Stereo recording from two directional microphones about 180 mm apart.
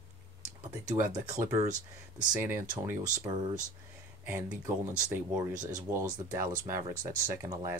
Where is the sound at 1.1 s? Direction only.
20° right (ahead or behind).